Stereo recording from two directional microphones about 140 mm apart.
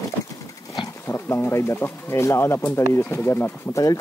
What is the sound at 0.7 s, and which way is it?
Speech, 25° left (ahead or behind).